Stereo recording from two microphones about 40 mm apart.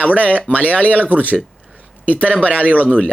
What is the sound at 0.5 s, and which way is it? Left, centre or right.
Speech, left.